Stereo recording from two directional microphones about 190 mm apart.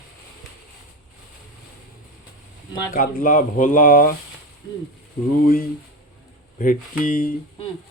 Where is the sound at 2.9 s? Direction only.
45° left (ahead or behind).